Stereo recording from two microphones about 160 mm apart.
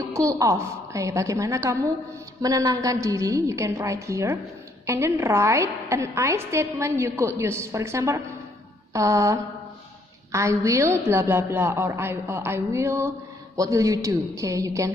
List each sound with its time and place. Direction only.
0.1 s a woman's voice: 20° right (ahead or behind)